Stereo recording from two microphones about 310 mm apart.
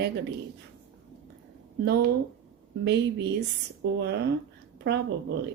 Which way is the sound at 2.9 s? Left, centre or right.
Right.